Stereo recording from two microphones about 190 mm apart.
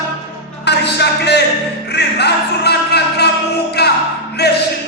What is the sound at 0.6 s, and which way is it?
Music, 60° left (ahead or behind).